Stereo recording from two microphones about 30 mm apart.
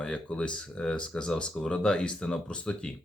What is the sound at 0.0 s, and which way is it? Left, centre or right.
Speech, left.